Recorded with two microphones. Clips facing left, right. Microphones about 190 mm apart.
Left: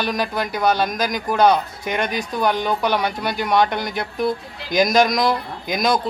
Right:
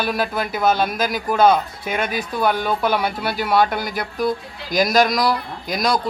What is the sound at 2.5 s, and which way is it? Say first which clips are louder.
Speech: even; 15° left (ahead or behind).